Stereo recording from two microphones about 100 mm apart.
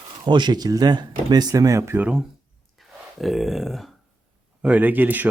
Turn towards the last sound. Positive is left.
turn(degrees=-20)  # may be behind; listen again after turning